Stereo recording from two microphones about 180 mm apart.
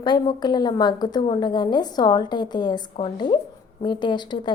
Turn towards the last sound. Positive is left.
turn(degrees=25)  # may be behind; listen again after turning